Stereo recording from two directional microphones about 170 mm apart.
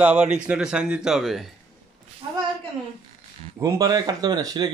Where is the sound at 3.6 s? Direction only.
20° right (ahead or behind).